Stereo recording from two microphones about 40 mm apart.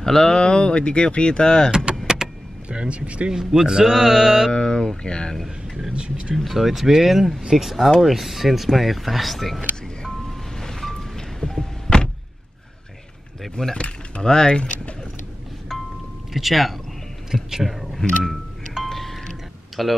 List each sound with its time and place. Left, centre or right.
0.0 s speech: centre
2.1 s vehicle: centre
2.7 s speech: right
3.6 s mantra: centre
4.5 s speech: left
5.9 s speech: right
6.3 s speech: centre
10.6 s vehicle: centre
13.4 s speech: centre
13.7 s speech: left
16.3 s speech: centre
17.3 s mantra: centre
17.6 s music: centre
19.8 s speech: centre